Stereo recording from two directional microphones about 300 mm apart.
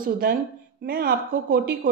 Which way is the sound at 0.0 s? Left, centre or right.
Right.